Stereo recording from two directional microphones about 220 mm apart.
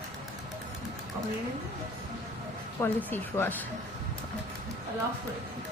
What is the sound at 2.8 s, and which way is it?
Speech, 10° left (ahead or behind).